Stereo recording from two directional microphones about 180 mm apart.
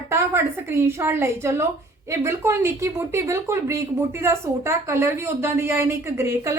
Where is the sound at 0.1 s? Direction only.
15° right (ahead or behind).